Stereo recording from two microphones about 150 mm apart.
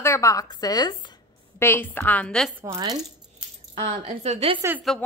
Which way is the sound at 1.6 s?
15° left (ahead or behind).